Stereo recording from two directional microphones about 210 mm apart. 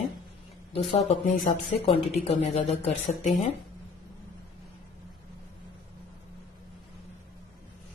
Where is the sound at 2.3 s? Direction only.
30° left (ahead or behind).